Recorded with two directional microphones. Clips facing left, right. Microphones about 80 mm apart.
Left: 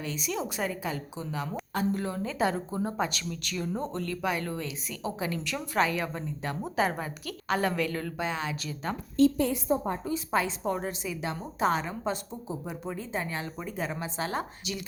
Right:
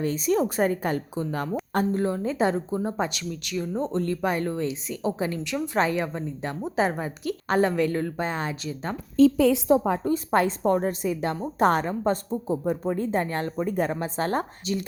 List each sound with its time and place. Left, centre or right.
0.0 s a woman's voice: right
1.9 s speech: right
3.8 s a woman's voice: right
7.4 s a woman's voice: right
8.6 s speech: right
9.5 s a woman's voice: right
10.0 s a woman's voice: right